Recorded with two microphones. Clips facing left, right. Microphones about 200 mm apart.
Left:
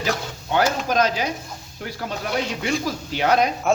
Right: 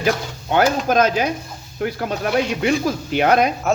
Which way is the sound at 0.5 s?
55° right (ahead or behind).